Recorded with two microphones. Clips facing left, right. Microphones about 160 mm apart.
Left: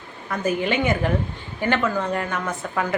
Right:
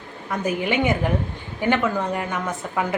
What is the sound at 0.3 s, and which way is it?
Speech, 15° right (ahead or behind).